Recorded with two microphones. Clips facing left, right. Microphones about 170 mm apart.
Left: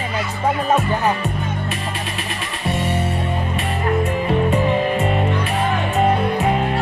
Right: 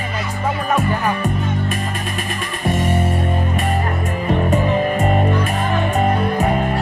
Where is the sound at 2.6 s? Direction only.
50° right (ahead or behind).